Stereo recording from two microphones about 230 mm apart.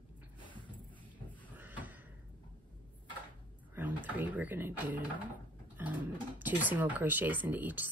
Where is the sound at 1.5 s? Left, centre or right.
Centre.